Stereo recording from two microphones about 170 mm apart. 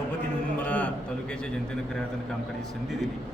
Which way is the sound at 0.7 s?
10° left (ahead or behind).